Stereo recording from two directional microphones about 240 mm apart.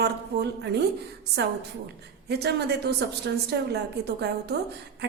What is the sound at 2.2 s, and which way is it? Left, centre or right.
A woman's voice, right.